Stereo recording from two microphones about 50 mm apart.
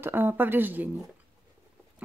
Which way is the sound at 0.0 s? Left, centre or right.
Right.